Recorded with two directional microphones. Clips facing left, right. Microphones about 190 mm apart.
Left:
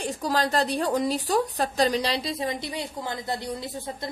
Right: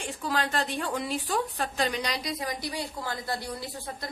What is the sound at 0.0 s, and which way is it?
A woman's voice, 40° left (ahead or behind).